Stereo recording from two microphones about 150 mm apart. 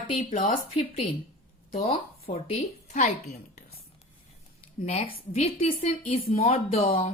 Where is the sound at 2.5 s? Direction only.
55° left (ahead or behind).